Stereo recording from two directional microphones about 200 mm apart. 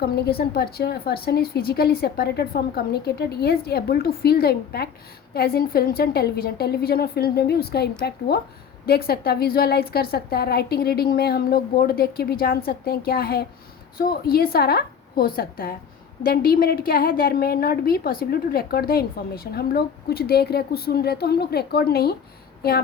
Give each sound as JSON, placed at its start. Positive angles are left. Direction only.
{"t": 0.0, "sound": "a woman's voice", "side_deg": 50}